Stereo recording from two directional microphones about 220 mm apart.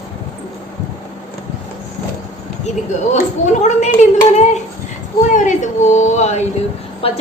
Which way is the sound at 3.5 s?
30° left (ahead or behind).